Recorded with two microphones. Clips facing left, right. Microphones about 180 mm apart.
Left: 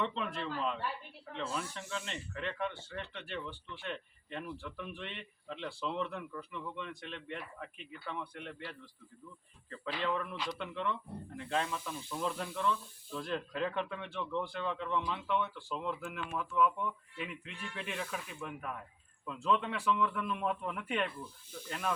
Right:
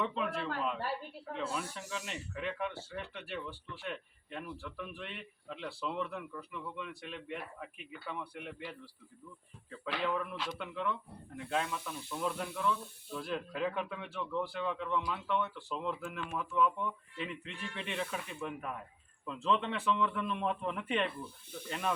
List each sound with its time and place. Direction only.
0.0 s speech: 5° right (ahead or behind)
0.8 s a woman's voice: 40° right (ahead or behind)
1.4 s speech: 5° right (ahead or behind)